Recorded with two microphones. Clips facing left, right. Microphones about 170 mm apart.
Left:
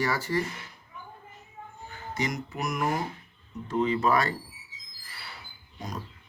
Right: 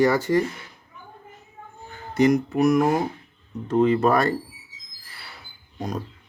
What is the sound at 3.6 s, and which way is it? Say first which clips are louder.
Speech: right 7 dB; 55° right (ahead or behind).